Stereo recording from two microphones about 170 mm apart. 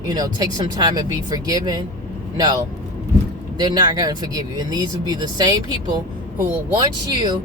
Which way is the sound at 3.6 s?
25° right (ahead or behind).